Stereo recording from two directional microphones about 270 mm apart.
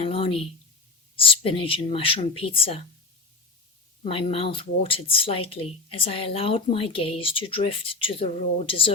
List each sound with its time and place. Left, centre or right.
0.0 s speech: left
4.0 s speech: centre